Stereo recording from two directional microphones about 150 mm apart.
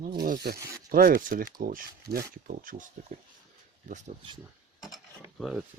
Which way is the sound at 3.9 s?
50° right (ahead or behind).